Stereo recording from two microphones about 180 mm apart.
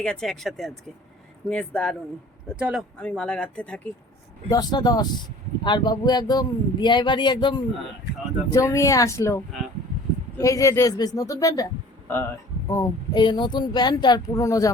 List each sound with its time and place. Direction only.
0.0 s speech: 5° left (ahead or behind)
3.0 s speech: 5° left (ahead or behind)
4.4 s speech: 20° left (ahead or behind)